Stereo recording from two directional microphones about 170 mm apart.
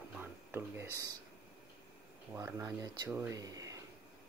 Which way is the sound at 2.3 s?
20° right (ahead or behind).